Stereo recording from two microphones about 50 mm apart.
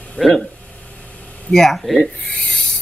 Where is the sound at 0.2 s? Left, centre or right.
Centre.